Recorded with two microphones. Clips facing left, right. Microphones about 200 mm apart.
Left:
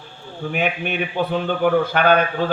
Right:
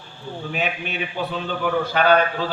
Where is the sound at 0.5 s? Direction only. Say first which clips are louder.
Left 5 dB; 55° left (ahead or behind).